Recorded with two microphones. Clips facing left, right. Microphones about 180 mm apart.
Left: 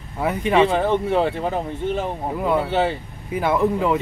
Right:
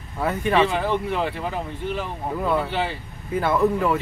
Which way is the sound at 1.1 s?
35° left (ahead or behind).